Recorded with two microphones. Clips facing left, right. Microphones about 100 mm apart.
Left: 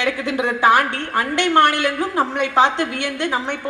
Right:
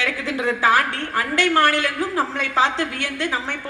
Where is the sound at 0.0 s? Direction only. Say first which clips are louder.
Left 3 dB; 20° left (ahead or behind).